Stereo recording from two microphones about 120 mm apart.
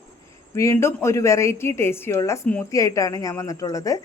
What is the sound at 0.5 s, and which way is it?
A woman's voice, 25° left (ahead or behind).